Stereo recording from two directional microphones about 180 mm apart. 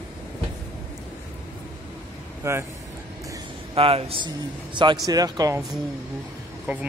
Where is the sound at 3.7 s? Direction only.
30° right (ahead or behind).